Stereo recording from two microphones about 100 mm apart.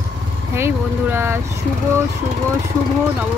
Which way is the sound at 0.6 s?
25° right (ahead or behind).